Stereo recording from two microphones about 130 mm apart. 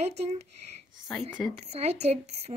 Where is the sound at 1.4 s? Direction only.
5° left (ahead or behind).